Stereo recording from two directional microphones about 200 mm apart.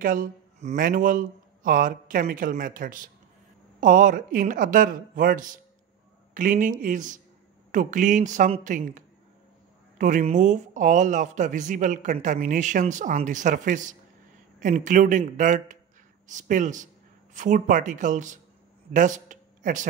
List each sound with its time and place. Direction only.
0.0 s speech: 40° right (ahead or behind)